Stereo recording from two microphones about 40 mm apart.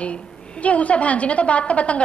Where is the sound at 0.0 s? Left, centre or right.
Left.